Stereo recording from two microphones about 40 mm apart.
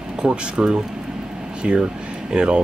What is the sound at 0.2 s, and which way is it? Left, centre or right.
Speech, right.